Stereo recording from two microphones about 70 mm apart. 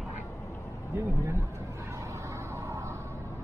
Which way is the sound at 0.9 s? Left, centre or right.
Right.